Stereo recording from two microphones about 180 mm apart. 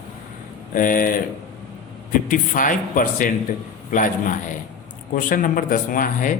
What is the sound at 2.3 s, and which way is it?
Speech, 45° left (ahead or behind).